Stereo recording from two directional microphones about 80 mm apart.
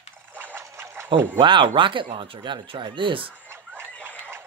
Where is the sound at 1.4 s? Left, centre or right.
Right.